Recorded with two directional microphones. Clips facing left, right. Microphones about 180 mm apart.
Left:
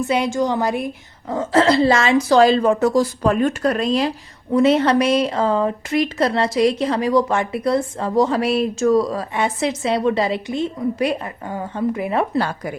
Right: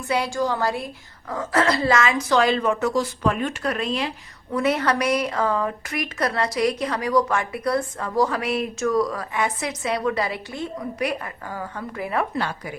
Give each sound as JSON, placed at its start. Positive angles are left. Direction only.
{"t": 0.1, "sound": "speech", "side_deg": 20}
{"t": 4.5, "sound": "speech", "side_deg": 25}
{"t": 12.4, "sound": "speech", "side_deg": 40}